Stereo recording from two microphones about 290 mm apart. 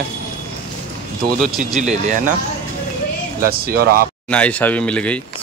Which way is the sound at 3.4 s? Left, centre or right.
Right.